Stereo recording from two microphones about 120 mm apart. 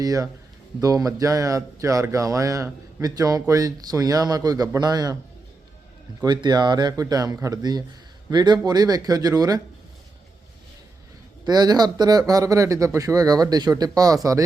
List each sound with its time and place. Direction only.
0.0 s speech: 30° right (ahead or behind)
6.2 s speech: 35° right (ahead or behind)
11.4 s speech: 35° right (ahead or behind)